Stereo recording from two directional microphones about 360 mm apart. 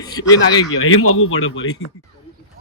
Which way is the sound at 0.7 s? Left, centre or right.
Left.